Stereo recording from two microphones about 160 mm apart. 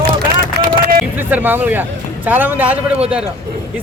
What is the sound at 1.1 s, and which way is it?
A man's voice, 10° right (ahead or behind).